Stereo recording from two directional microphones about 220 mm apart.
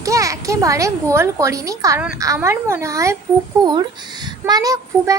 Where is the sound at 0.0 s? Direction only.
15° right (ahead or behind).